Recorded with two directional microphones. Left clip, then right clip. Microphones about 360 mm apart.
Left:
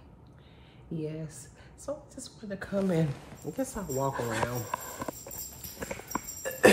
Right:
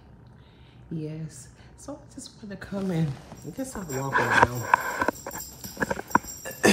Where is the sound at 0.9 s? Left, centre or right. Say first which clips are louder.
Even; centre.